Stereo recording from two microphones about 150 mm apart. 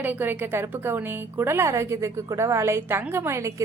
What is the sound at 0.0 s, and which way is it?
A woman's voice, 10° right (ahead or behind).